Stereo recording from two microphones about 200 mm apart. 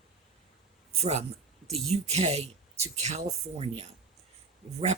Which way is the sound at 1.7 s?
30° right (ahead or behind).